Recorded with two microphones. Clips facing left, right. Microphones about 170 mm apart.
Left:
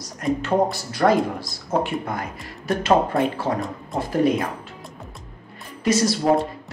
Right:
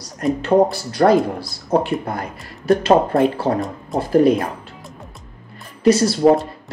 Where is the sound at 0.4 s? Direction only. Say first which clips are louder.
Right 8 dB; 30° right (ahead or behind).